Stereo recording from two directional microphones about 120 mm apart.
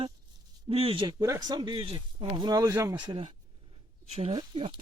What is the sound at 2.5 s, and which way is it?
Speech, 30° right (ahead or behind).